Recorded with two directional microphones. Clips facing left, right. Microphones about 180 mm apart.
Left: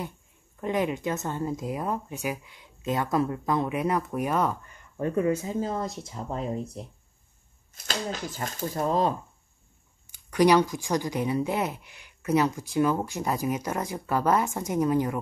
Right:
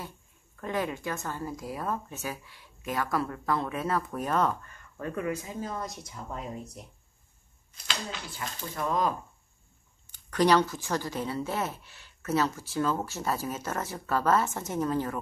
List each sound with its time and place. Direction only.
0.6 s speech: 20° left (ahead or behind)
7.7 s speech: 45° left (ahead or behind)
10.1 s speech: 10° left (ahead or behind)